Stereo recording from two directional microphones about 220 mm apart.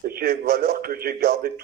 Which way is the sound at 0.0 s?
45° right (ahead or behind).